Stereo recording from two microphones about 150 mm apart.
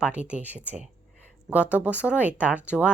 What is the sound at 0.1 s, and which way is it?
Speech, 10° right (ahead or behind).